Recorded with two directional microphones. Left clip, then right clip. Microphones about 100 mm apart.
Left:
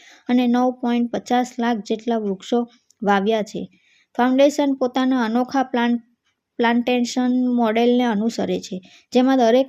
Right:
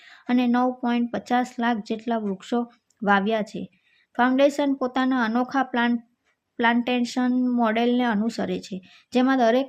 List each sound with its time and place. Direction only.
0.0 s speech: 20° left (ahead or behind)